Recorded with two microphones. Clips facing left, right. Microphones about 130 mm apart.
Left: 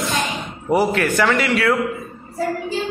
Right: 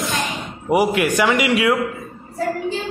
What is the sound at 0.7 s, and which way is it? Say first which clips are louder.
A man's voice: right 1 dB; 15° right (ahead or behind).